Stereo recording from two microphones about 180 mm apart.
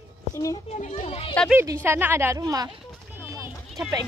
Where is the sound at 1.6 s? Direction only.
15° right (ahead or behind).